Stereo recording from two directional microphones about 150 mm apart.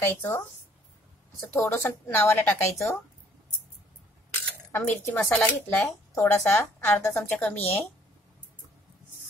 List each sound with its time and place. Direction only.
0.0 s a woman's voice: 15° left (ahead or behind)
1.4 s a woman's voice: 15° left (ahead or behind)
4.3 s cutlery: 15° left (ahead or behind)
5.3 s a woman's voice: 10° left (ahead or behind)